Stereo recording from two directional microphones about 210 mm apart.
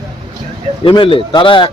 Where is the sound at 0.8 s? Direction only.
25° left (ahead or behind).